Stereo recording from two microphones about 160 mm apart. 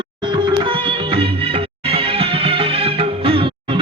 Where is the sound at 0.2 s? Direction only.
30° right (ahead or behind).